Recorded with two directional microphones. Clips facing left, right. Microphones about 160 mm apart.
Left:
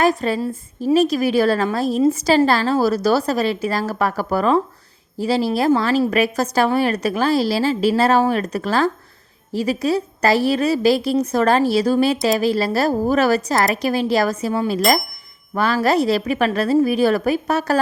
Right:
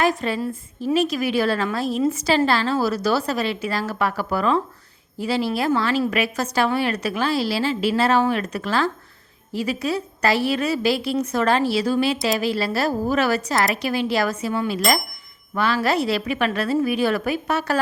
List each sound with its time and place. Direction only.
0.0 s a woman's voice: 40° left (ahead or behind)